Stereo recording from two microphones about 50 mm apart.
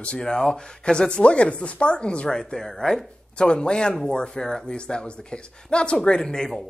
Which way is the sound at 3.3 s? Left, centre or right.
Centre.